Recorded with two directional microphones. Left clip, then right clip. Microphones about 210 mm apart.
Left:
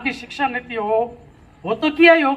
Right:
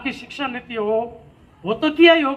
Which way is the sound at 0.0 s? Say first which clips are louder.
Left 4 dB; 35° left (ahead or behind).